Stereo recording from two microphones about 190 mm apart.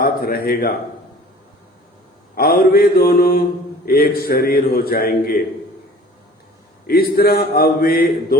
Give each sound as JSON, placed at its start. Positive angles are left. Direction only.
{"t": 0.0, "sound": "speech", "side_deg": 50}
{"t": 2.3, "sound": "a man's voice", "side_deg": 50}
{"t": 6.8, "sound": "a man's voice", "side_deg": 50}